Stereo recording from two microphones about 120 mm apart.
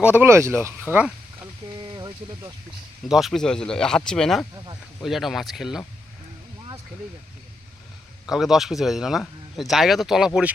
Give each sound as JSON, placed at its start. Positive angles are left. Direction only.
{"t": 0.0, "sound": "speech", "side_deg": -10}
{"t": 0.3, "sound": "speech", "side_deg": -20}
{"t": 0.8, "sound": "speech", "side_deg": -10}
{"t": 1.8, "sound": "a sound", "side_deg": -40}
{"t": 3.0, "sound": "speech", "side_deg": 0}
{"t": 8.3, "sound": "speech", "side_deg": -5}